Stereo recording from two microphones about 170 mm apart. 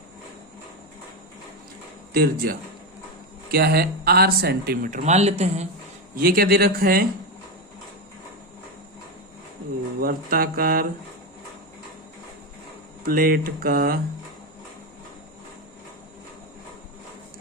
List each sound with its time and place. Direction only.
2.1 s speech: 60° right (ahead or behind); by 5.6 s 40° right (ahead or behind)
6.1 s speech: 60° right (ahead or behind)
10.0 s speech: 60° right (ahead or behind)
13.0 s speech: 60° right (ahead or behind)